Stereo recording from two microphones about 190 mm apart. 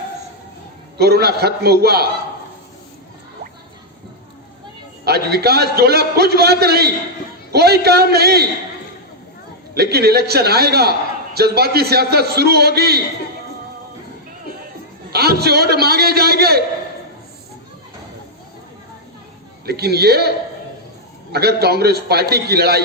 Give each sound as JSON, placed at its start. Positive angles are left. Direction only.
{"t": 0.9, "sound": "a man's voice", "side_deg": -55}
{"t": 5.0, "sound": "a man's voice", "side_deg": -55}
{"t": 9.7, "sound": "a man's voice", "side_deg": -55}
{"t": 15.1, "sound": "a man's voice", "side_deg": -55}
{"t": 19.6, "sound": "a man's voice", "side_deg": -55}
{"t": 21.3, "sound": "a man's voice", "side_deg": -55}